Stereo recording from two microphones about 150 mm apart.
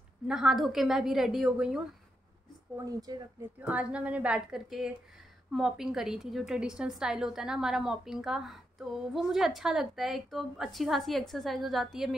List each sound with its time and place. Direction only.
0.3 s a woman's voice: 5° right (ahead or behind)
2.8 s speech: 25° right (ahead or behind)
3.6 s a woman's voice: 10° right (ahead or behind)